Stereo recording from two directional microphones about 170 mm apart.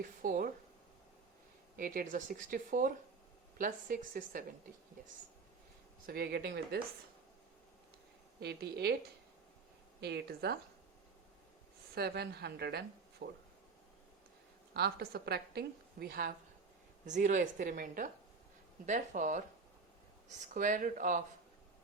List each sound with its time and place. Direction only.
0.2 s speech: 55° right (ahead or behind)
1.7 s a woman's voice: 55° right (ahead or behind)
6.1 s a woman's voice: 65° right (ahead or behind)
8.4 s a woman's voice: 75° right (ahead or behind)
10.0 s a woman's voice: 75° right (ahead or behind)
11.9 s a woman's voice: 70° right (ahead or behind)
14.7 s a woman's voice: 70° right (ahead or behind)
17.1 s a woman's voice: 45° right (ahead or behind)